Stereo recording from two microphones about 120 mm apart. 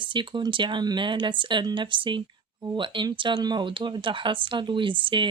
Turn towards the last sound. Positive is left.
turn(degrees=-40)  # may be behind; listen again after turning